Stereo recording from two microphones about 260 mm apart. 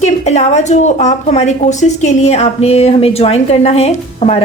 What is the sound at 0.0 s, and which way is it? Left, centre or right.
A woman's voice, left.